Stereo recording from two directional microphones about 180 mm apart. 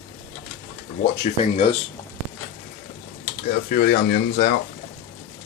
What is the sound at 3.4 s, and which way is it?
Speech, 55° left (ahead or behind).